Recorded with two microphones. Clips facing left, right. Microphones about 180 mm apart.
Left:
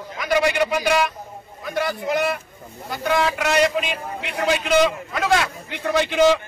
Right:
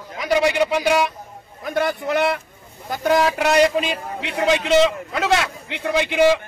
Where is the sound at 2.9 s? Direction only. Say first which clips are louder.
Right 3 dB; 40° right (ahead or behind).